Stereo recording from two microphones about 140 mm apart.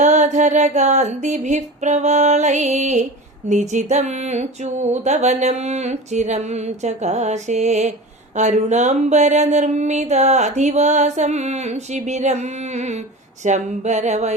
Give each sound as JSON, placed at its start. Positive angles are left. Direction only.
{"t": 0.0, "sound": "speech", "side_deg": -55}